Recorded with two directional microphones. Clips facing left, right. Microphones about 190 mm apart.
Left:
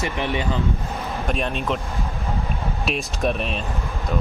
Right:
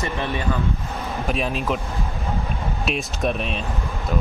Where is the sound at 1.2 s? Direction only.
Centre (ahead or behind).